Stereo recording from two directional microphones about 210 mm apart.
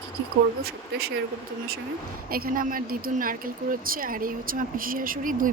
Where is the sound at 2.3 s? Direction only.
45° right (ahead or behind).